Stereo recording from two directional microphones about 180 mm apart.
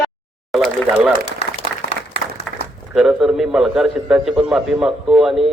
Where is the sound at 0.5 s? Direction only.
5° right (ahead or behind).